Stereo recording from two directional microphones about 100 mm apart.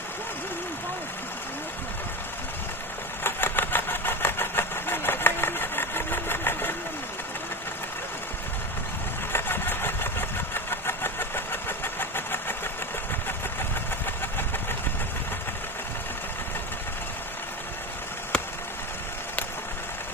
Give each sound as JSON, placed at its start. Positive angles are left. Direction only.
{"t": 3.2, "sound": "engine", "side_deg": 20}
{"t": 9.3, "sound": "engine", "side_deg": 20}